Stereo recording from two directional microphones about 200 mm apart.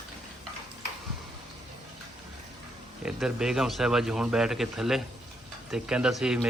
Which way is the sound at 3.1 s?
5° right (ahead or behind).